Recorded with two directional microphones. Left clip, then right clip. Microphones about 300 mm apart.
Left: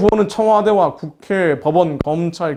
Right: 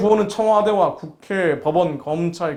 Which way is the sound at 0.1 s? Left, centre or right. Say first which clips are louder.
Left 2 dB; left.